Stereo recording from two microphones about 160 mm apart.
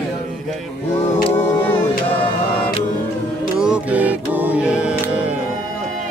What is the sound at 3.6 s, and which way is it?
Music, 5° right (ahead or behind).